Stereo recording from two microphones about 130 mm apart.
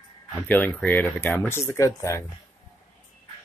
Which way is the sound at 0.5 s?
10° left (ahead or behind).